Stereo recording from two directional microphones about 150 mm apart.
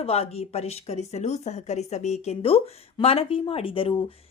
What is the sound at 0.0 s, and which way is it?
A woman's voice, 40° left (ahead or behind).